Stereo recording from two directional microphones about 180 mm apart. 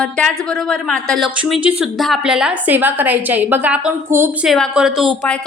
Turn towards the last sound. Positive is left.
turn(degrees=0)  # may be behind; listen again after turning